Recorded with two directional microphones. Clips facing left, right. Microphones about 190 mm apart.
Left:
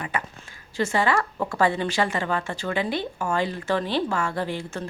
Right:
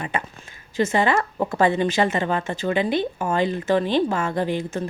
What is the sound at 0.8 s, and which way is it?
A woman's voice, 20° right (ahead or behind).